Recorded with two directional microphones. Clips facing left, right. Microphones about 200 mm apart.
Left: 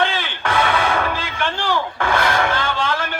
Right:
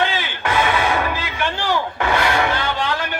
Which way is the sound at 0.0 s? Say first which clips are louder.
Even; 15° right (ahead or behind).